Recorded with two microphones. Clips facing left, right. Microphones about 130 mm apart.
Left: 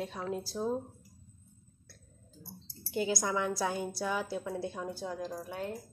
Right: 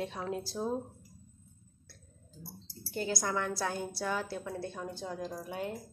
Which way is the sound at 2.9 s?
10° left (ahead or behind).